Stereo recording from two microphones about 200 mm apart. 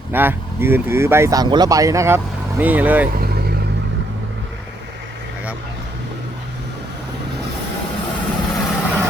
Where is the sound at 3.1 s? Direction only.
50° right (ahead or behind).